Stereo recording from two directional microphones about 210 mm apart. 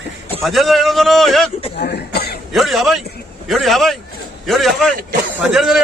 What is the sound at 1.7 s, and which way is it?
Speech, 50° left (ahead or behind).